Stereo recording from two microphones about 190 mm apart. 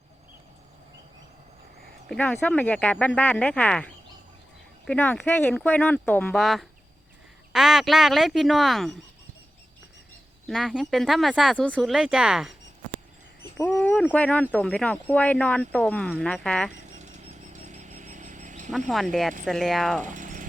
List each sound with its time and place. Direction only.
2.0 s speech: 10° left (ahead or behind)
10.4 s speech: centre (ahead or behind)
13.6 s speech: 10° left (ahead or behind)
16.8 s vehicle: 40° right (ahead or behind)
18.9 s speech: centre (ahead or behind)
20.1 s vehicle: 40° right (ahead or behind)